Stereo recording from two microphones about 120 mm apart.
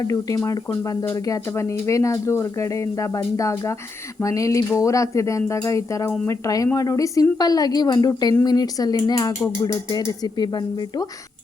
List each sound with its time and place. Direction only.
0.0 s a woman's voice: 30° left (ahead or behind)